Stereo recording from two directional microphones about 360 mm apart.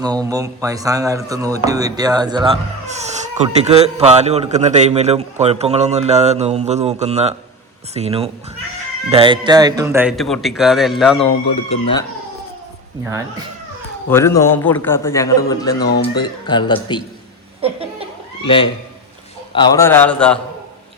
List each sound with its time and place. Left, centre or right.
0.0 s a man's voice: centre
11.5 s a man's voice: centre
13.1 s speech: centre
14.1 s a man's voice: centre
18.4 s a man's voice: centre